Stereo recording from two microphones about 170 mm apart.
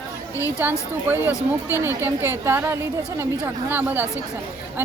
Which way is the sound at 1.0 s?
15° right (ahead or behind).